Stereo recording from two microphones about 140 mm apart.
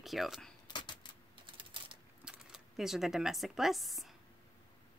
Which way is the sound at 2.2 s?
5° right (ahead or behind).